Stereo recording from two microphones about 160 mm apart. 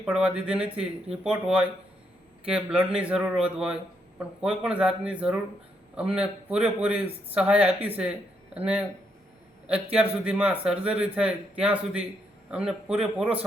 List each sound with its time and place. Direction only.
0.0 s a man's voice: 5° right (ahead or behind)